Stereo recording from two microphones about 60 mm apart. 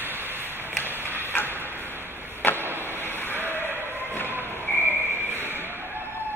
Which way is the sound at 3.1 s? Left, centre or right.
Left.